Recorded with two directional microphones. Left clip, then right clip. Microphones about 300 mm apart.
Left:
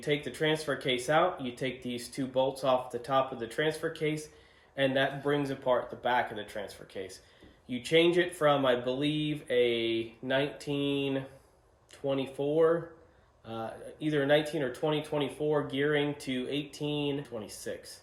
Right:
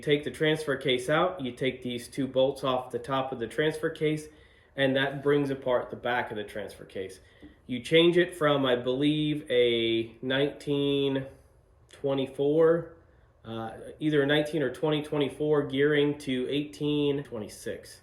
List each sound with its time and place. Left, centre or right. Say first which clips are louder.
0.0 s speech: right 4 dB; centre